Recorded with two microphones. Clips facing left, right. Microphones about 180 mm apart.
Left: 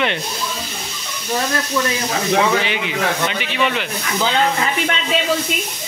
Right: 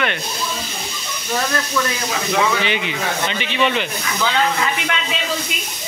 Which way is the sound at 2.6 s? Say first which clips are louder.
Left 1 dB; 5° left (ahead or behind).